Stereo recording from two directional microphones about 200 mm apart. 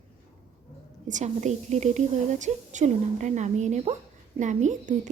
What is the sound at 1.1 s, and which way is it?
Speech, 35° right (ahead or behind).